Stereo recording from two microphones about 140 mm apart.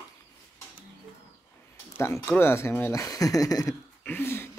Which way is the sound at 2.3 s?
15° left (ahead or behind).